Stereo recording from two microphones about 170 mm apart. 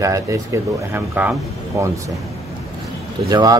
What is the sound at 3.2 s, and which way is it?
Speech, 20° right (ahead or behind).